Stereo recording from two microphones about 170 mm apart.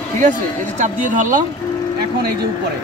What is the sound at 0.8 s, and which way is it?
Speech, 50° right (ahead or behind).